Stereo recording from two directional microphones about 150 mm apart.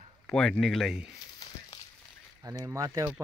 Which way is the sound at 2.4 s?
20° right (ahead or behind).